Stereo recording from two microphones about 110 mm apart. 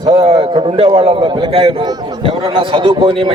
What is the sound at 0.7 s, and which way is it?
A man's voice, 65° right (ahead or behind).